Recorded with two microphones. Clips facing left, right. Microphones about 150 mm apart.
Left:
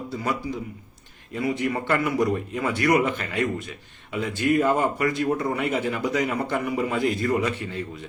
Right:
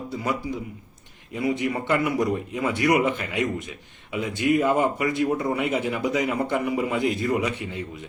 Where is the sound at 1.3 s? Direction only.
15° right (ahead or behind).